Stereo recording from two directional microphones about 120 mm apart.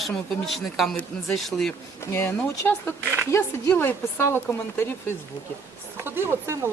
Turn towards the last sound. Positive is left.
turn(degrees=-20)  # may be behind; listen again after turning